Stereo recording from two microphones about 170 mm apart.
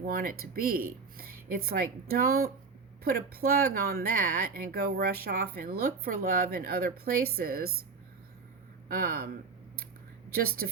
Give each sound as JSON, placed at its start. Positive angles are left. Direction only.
{"t": 0.0, "sound": "speech", "side_deg": -60}
{"t": 8.9, "sound": "speech", "side_deg": -60}
{"t": 10.3, "sound": "speech", "side_deg": -65}